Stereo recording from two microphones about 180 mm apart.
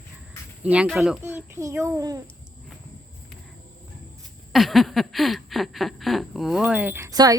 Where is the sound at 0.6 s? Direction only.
5° right (ahead or behind).